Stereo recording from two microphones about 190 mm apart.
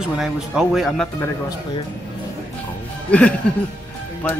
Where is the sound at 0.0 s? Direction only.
5° right (ahead or behind).